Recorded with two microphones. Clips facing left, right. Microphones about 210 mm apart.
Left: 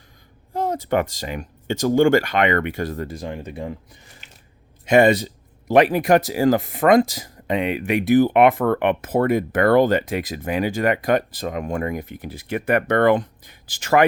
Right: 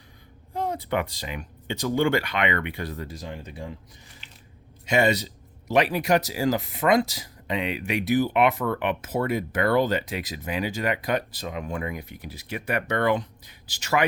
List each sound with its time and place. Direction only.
0.5 s speech: 40° left (ahead or behind)
4.9 s speech: 50° left (ahead or behind)